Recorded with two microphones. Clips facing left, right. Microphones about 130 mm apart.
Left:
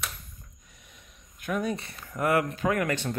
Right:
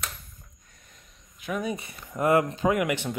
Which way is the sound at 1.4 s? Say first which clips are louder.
Left 1 dB; 5° right (ahead or behind).